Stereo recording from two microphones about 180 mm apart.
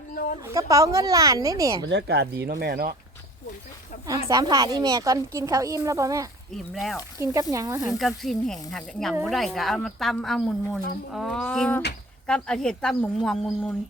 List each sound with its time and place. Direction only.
0.1 s a sound: 50° left (ahead or behind)
0.4 s a woman's voice: 20° right (ahead or behind)
1.9 s speech: 65° right (ahead or behind)
4.3 s a woman's voice: 20° right (ahead or behind)
7.9 s a woman's voice: centre (ahead or behind)